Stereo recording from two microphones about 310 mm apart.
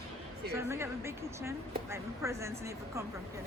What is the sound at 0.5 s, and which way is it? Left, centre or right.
Speech, centre.